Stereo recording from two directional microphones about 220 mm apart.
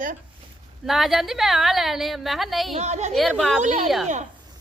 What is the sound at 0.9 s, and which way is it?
A woman's voice, centre (ahead or behind).